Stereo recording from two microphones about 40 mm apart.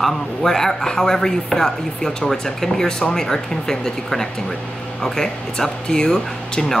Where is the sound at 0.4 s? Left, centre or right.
Centre.